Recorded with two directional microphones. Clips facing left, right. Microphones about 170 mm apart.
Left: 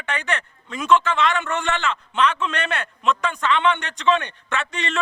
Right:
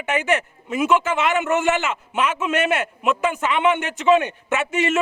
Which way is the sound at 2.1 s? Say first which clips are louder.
Right 1 dB; 10° right (ahead or behind).